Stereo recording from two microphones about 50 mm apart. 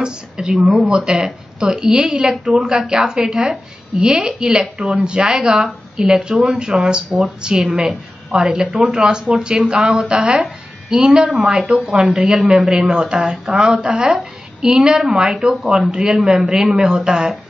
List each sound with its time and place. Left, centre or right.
0.0 s a woman's voice: centre
11.2 s a man's voice: centre; by 14.1 s right
14.1 s a woman's voice: centre